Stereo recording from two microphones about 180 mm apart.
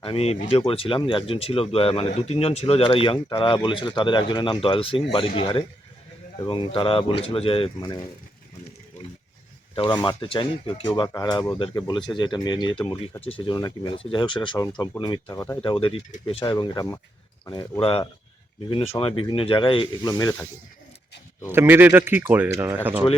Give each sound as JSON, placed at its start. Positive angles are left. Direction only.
{"t": 0.0, "sound": "speech", "side_deg": 30}
{"t": 9.7, "sound": "speech", "side_deg": 25}
{"t": 12.8, "sound": "speech", "side_deg": 10}
{"t": 13.2, "sound": "speech", "side_deg": 30}
{"t": 15.6, "sound": "speech", "side_deg": 30}
{"t": 21.5, "sound": "speech", "side_deg": -10}